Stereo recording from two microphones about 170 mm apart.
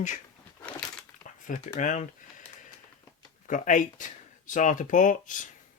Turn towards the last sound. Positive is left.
turn(degrees=50)  # may be behind; listen again after turning